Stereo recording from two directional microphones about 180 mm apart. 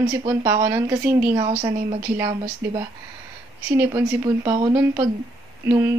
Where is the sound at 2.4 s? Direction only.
25° right (ahead or behind).